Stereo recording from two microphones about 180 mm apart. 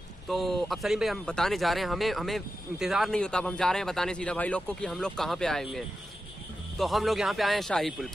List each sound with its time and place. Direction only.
0.3 s speech: centre (ahead or behind)